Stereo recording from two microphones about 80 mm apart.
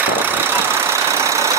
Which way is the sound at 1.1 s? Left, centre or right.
Right.